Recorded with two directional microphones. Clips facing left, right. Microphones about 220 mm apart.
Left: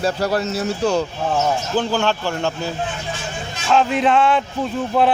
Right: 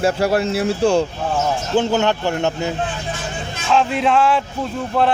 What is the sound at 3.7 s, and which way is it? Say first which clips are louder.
Speech: even; centre (ahead or behind).